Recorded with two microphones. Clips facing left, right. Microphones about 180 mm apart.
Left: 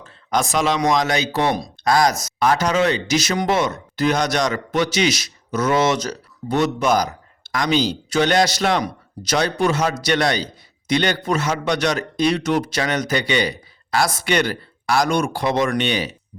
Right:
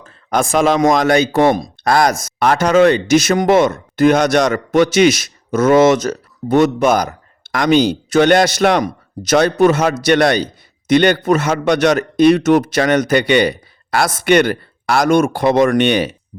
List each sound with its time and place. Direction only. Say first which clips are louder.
0.0 s speech: right 4 dB; 50° right (ahead or behind)